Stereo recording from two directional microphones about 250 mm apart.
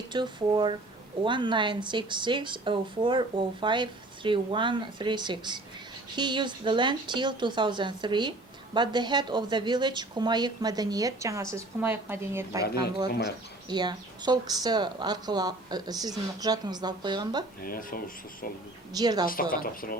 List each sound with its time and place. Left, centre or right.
0.1 s speech: centre
13.7 s speech: centre
17.6 s speech: left
18.9 s speech: centre
19.2 s speech: left